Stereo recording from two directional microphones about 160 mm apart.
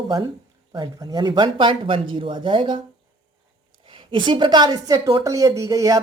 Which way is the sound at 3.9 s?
30° right (ahead or behind).